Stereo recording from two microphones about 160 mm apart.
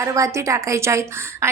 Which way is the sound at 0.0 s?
20° right (ahead or behind).